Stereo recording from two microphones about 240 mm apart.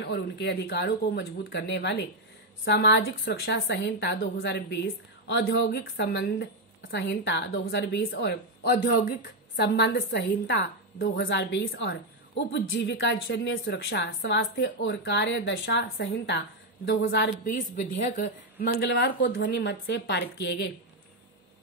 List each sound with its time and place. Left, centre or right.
0.0 s a woman's voice: left